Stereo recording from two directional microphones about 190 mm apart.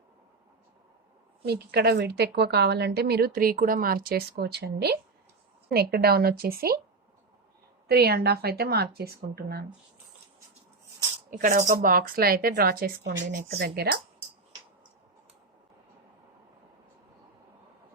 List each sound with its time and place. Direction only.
1.5 s a woman's voice: 60° right (ahead or behind)
7.9 s a woman's voice: 55° right (ahead or behind)
11.3 s a woman's voice: 45° right (ahead or behind)